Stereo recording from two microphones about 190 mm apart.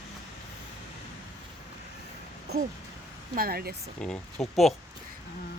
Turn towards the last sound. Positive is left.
turn(degrees=0)  # may be behind; listen again after turning